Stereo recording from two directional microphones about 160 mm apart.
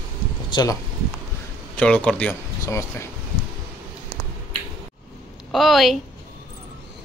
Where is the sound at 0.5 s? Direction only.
20° left (ahead or behind).